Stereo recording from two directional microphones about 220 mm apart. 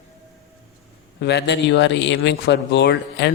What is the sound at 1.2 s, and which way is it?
A man's voice, 50° left (ahead or behind).